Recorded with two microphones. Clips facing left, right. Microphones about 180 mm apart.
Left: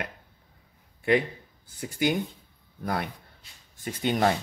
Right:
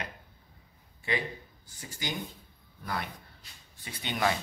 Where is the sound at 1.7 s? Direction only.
60° left (ahead or behind).